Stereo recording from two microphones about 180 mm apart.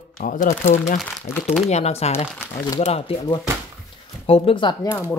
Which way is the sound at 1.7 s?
35° left (ahead or behind).